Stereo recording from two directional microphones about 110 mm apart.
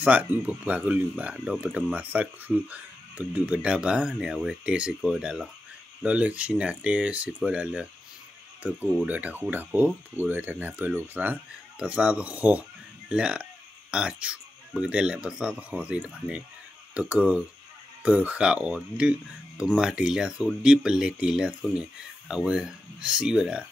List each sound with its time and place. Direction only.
0.0 s speech: 15° right (ahead or behind)